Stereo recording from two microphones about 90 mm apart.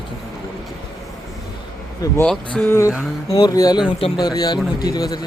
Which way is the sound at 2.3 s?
5° left (ahead or behind).